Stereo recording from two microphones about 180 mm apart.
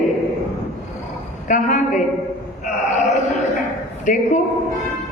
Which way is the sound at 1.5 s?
45° left (ahead or behind).